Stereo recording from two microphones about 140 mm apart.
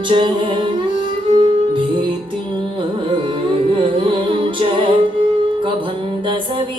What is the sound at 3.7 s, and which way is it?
Carnatic music, 35° right (ahead or behind).